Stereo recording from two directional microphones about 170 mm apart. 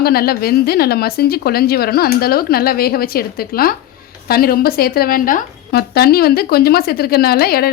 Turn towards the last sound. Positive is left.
turn(degrees=65)  # may be behind; listen again after turning